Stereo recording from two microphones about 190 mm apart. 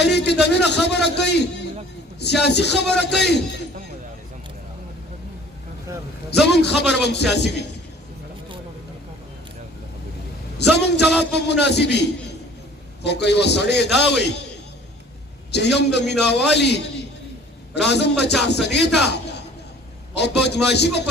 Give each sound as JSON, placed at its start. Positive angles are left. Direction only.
{"t": 0.0, "sound": "a sound", "side_deg": 60}
{"t": 2.1, "sound": "a man's voice", "side_deg": 60}
{"t": 6.4, "sound": "a man's voice", "side_deg": 60}
{"t": 10.6, "sound": "a man's voice", "side_deg": 65}
{"t": 15.5, "sound": "a man's voice", "side_deg": 65}